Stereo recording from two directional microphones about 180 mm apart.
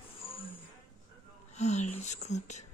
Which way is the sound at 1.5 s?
40° left (ahead or behind).